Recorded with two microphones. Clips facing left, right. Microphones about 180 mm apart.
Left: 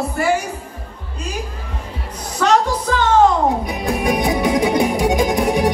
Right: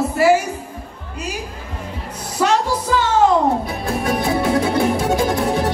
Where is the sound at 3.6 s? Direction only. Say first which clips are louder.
Left 2 dB; 15° left (ahead or behind).